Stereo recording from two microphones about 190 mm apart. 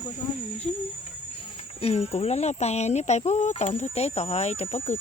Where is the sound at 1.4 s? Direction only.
30° left (ahead or behind).